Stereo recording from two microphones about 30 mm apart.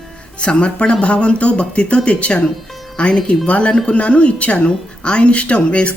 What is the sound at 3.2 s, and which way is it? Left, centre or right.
Speech, left.